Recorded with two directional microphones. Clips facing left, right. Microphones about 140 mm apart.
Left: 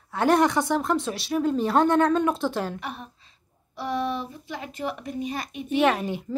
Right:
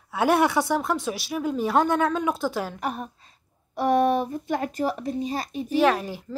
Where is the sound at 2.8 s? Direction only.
45° right (ahead or behind).